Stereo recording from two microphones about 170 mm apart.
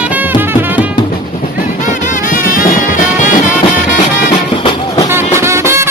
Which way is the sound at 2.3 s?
55° left (ahead or behind).